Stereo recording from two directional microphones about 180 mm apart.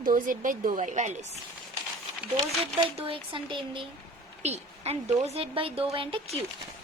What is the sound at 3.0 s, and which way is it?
A woman's voice, 30° right (ahead or behind).